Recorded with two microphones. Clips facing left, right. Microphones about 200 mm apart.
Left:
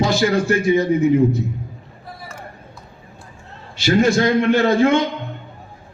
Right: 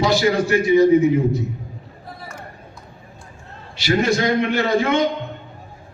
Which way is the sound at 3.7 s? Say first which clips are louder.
Left 3 dB; 45° left (ahead or behind).